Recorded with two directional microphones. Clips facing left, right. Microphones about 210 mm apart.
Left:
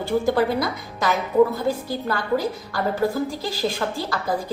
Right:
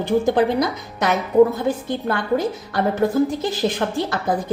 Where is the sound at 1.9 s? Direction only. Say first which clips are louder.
Right 2 dB; 20° right (ahead or behind).